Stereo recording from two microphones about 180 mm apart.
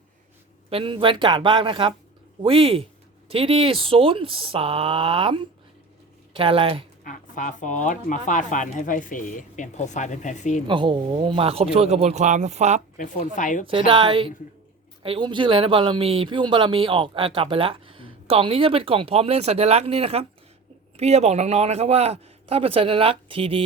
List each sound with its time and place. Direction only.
0.7 s speech: 30° right (ahead or behind)
7.0 s speech: 45° left (ahead or behind)
10.7 s speech: 25° right (ahead or behind)
13.0 s speech: 45° left (ahead or behind)
13.7 s speech: 30° right (ahead or behind)